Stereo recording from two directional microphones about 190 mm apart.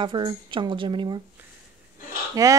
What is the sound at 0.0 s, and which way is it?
Speech, 25° right (ahead or behind).